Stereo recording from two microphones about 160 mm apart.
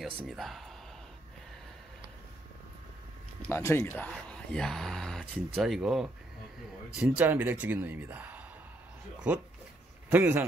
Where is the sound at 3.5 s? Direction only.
15° left (ahead or behind); by 6.1 s 5° right (ahead or behind).